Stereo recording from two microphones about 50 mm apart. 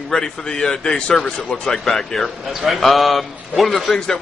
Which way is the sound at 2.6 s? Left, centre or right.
Centre.